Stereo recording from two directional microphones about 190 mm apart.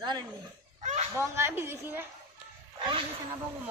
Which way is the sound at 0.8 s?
35° right (ahead or behind).